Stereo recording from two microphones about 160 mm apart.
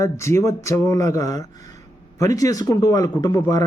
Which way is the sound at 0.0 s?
15° left (ahead or behind).